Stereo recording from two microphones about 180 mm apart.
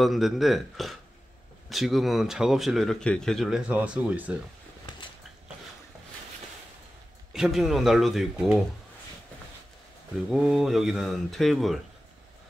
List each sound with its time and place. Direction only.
0.0 s speech: centre (ahead or behind)
4.9 s a sound: 25° left (ahead or behind)
7.3 s speech: centre (ahead or behind)
10.3 s speech: centre (ahead or behind)